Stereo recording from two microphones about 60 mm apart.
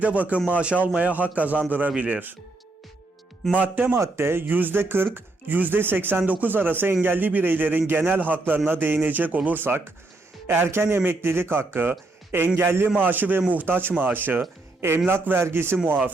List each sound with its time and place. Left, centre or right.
0.0 s a man's voice: right
3.5 s a man's voice: right
3.9 s a man's voice: right
15.9 s speech: right